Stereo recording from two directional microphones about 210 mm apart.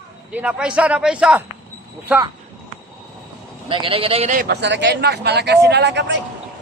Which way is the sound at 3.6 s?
25° right (ahead or behind).